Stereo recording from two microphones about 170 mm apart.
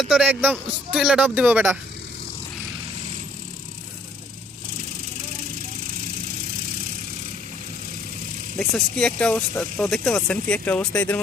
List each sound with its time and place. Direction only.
0.0 s speech: 5° right (ahead or behind)
8.5 s speech: 5° left (ahead or behind)